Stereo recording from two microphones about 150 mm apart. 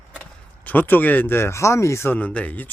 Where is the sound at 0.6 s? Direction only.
10° left (ahead or behind).